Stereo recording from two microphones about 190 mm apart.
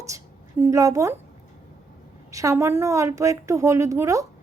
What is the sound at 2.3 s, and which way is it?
A woman's voice, 15° right (ahead or behind).